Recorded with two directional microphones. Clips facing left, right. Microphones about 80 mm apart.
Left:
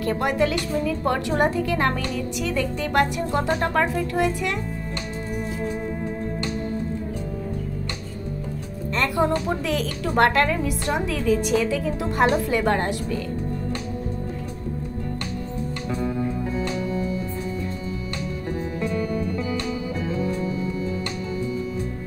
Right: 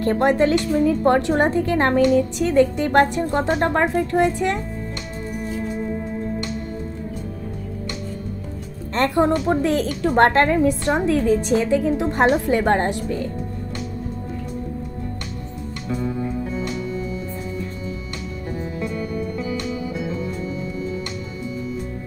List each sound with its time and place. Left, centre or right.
0.0 s speech: right
8.9 s a woman's voice: right